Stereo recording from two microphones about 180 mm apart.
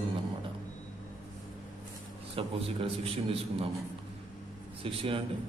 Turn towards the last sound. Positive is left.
turn(degrees=-30)  # may be behind; listen again after turning